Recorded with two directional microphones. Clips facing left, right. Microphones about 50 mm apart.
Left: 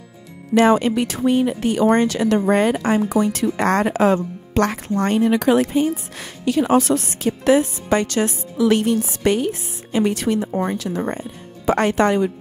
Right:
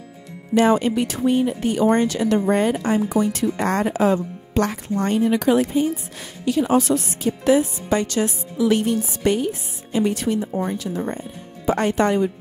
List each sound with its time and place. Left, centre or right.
0.6 s speech: left